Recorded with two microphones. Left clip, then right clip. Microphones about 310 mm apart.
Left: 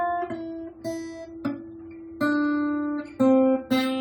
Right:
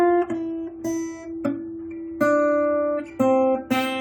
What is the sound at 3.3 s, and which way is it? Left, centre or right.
Guitar, right.